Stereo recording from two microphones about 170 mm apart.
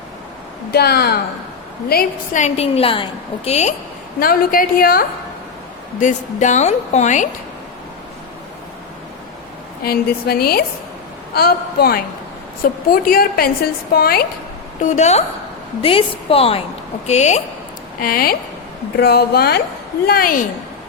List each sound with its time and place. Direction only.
0.7 s a woman's voice: 70° left (ahead or behind)
2.4 s a woman's voice: 35° left (ahead or behind)
4.2 s a woman's voice: 55° left (ahead or behind)
6.0 s a woman's voice: 45° left (ahead or behind)
9.8 s a woman's voice: 65° left (ahead or behind)
14.8 s a woman's voice: 45° left (ahead or behind)
18.0 s a woman's voice: 60° left (ahead or behind)
18.9 s a woman's voice: 70° left (ahead or behind)